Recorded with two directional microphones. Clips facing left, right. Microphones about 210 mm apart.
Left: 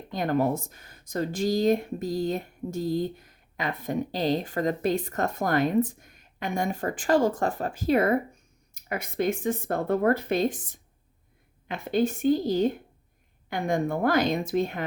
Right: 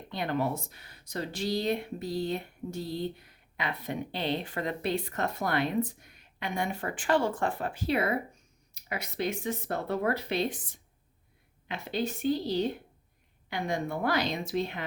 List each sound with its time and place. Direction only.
0.1 s speech: 45° left (ahead or behind)